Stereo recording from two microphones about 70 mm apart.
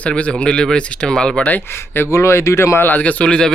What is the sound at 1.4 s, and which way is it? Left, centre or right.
Speech, left.